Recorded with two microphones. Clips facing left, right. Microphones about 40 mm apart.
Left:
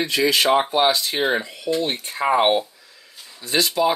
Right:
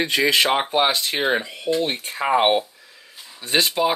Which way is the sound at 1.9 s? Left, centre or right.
Right.